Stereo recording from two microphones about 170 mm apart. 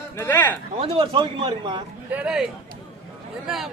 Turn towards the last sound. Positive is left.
turn(degrees=0)  # may be behind; listen again after turning